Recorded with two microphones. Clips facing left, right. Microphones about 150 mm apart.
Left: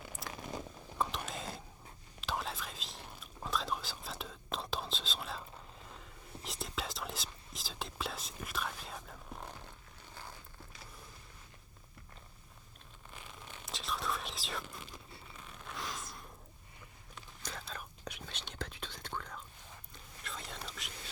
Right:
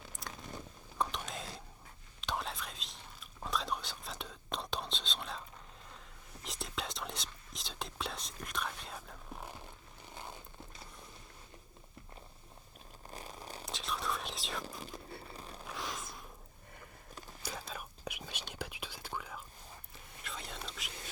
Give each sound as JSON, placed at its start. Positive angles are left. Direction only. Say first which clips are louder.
{"t": 0.1, "sound": "crunch", "louder": "left 1 dB", "side_deg": 0}
{"t": 0.9, "sound": "whispering", "louder": "even", "side_deg": 0}
{"t": 6.4, "sound": "whispering", "louder": "even", "side_deg": 0}
{"t": 10.2, "sound": "zipper", "louder": "right 3 dB", "side_deg": -20}
{"t": 13.1, "sound": "a sound", "louder": "right 5 dB", "side_deg": -40}
{"t": 13.7, "sound": "whispering", "louder": "even", "side_deg": 0}
{"t": 15.3, "sound": "a sound", "louder": "right 4 dB", "side_deg": -35}
{"t": 15.6, "sound": "a sound", "louder": "even", "side_deg": 0}
{"t": 17.4, "sound": "whispering", "louder": "right 2 dB", "side_deg": -10}